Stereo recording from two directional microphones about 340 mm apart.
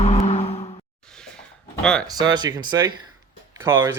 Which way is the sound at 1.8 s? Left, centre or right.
Centre.